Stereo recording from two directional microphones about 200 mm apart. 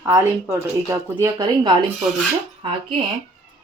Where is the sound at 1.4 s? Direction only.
20° right (ahead or behind).